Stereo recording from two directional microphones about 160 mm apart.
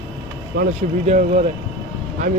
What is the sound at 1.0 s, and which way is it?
Speech, 50° right (ahead or behind).